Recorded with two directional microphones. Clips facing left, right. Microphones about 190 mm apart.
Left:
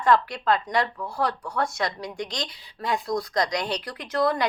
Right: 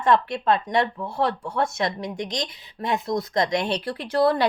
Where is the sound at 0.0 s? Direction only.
25° right (ahead or behind).